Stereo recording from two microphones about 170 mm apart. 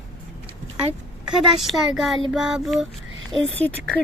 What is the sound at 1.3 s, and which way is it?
Speech, centre (ahead or behind).